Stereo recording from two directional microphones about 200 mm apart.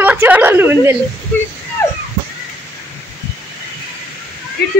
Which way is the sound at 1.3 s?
5° left (ahead or behind).